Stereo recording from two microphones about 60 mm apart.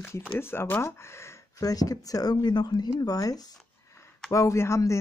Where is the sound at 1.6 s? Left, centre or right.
Left.